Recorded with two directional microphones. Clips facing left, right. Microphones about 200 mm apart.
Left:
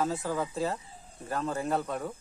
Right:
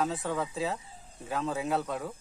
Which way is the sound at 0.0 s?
Centre (ahead or behind).